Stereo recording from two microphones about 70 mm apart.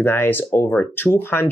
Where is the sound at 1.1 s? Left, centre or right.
Left.